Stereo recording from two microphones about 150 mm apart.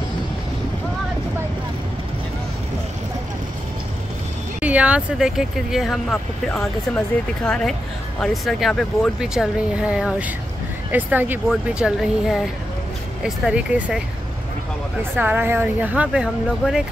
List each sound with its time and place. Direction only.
4.6 s speech: 10° right (ahead or behind)
15.1 s speech: 10° right (ahead or behind)